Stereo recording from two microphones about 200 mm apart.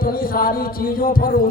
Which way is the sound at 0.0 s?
45° left (ahead or behind).